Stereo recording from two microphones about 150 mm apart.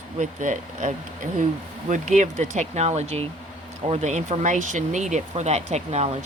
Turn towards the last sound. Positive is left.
turn(degrees=-45)  # may be behind; listen again after turning